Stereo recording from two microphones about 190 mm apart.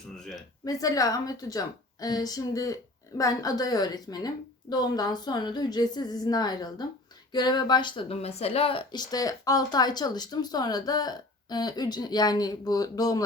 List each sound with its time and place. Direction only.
0.6 s speech: 20° left (ahead or behind)